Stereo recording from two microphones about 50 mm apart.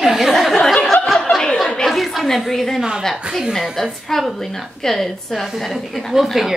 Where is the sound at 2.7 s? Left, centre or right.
Centre.